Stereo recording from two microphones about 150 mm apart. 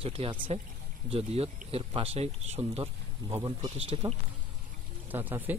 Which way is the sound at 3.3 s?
25° right (ahead or behind).